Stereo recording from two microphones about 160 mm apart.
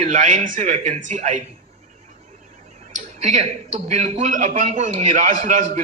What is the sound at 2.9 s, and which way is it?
A man's voice, 50° right (ahead or behind).